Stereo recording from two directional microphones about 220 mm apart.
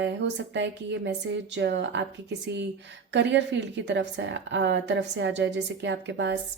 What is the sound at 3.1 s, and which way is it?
A woman's voice, 55° right (ahead or behind).